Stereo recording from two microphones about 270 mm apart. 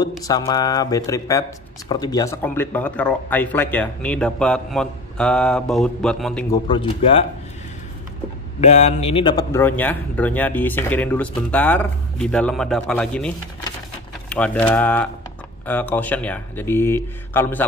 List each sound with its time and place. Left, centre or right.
0.2 s speech: centre
6.5 s speech: centre
8.5 s speech: left; by 13.3 s centre
14.3 s speech: centre